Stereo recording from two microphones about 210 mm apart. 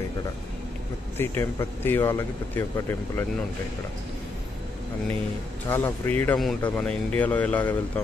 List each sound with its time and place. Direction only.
1.1 s speech: 10° left (ahead or behind)
5.7 s speech: 10° left (ahead or behind)